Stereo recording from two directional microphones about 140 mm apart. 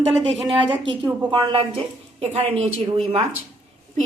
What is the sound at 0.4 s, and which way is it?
Speech, 40° right (ahead or behind).